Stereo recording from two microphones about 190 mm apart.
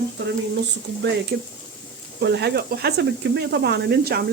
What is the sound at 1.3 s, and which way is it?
Speech, 55° right (ahead or behind).